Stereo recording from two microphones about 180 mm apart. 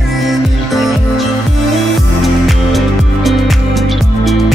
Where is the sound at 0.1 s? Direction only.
Centre (ahead or behind).